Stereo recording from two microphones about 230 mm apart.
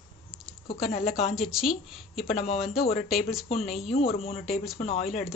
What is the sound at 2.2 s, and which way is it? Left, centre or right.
Speech, left.